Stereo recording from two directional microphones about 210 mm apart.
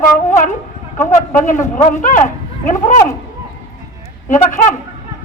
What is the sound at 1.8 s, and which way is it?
A man's voice, 35° left (ahead or behind).